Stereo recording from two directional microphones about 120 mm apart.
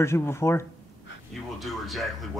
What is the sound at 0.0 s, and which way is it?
Speech, 20° left (ahead or behind).